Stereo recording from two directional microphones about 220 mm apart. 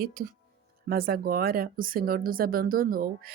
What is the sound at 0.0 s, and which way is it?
Speech, 40° right (ahead or behind).